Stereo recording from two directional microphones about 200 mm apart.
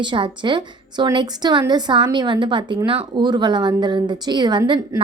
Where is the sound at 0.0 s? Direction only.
25° right (ahead or behind).